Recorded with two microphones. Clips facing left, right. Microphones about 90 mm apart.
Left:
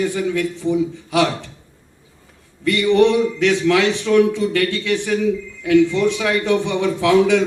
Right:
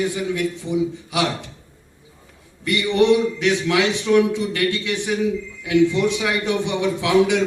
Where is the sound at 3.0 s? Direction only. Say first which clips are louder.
Right 1 dB; 15° right (ahead or behind).